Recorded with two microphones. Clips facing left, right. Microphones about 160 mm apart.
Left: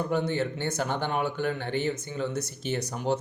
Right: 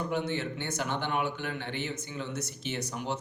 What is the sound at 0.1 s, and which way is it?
A man's voice, 40° left (ahead or behind).